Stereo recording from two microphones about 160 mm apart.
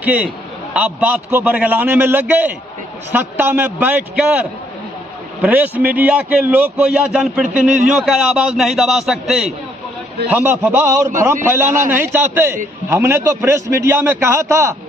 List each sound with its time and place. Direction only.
0.0 s a man's voice: 10° right (ahead or behind)
5.4 s a man's voice: 10° right (ahead or behind)